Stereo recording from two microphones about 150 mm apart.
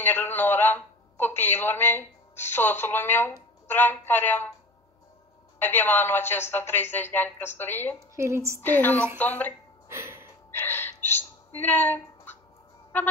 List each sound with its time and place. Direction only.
0.0 s a man's voice: 15° left (ahead or behind)
5.6 s a man's voice: 15° left (ahead or behind)
8.2 s a woman's voice: 20° right (ahead or behind)
8.5 s a man's voice: 10° left (ahead or behind)
9.8 s gasp: 20° right (ahead or behind)
10.6 s a sound: 15° left (ahead or behind)